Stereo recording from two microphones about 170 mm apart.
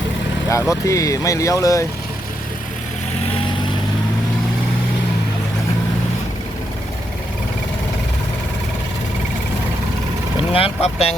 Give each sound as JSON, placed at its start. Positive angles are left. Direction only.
{"t": 0.7, "sound": "speech", "side_deg": 20}
{"t": 10.5, "sound": "speech", "side_deg": 35}